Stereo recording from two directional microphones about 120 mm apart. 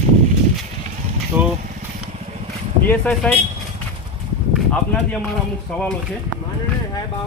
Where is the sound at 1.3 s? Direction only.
15° right (ahead or behind).